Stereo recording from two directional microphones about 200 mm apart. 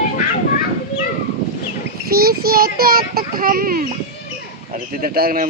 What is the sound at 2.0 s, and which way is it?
Speech, 50° right (ahead or behind).